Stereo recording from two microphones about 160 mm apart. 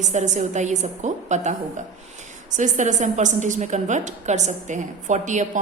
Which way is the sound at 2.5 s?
50° right (ahead or behind).